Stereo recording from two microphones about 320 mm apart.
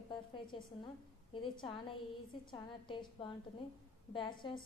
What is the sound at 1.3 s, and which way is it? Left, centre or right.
Speech, centre.